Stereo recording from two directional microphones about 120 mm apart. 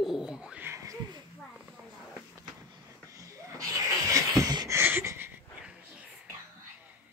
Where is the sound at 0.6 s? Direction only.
25° right (ahead or behind).